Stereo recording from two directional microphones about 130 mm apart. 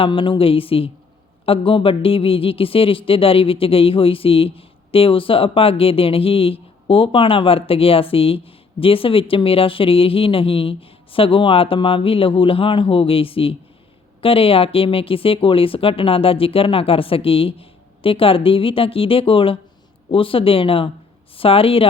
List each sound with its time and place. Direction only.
0.0 s a man's voice: 40° left (ahead or behind)